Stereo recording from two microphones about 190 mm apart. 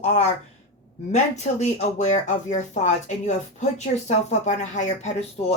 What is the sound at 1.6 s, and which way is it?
Speech, 40° left (ahead or behind).